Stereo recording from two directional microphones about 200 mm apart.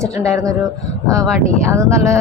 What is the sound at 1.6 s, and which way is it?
Speech, 15° right (ahead or behind).